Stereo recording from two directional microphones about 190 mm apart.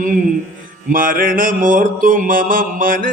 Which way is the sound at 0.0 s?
40° right (ahead or behind).